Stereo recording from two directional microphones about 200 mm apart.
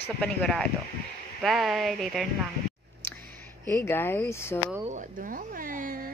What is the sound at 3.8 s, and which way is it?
Speech, 10° left (ahead or behind).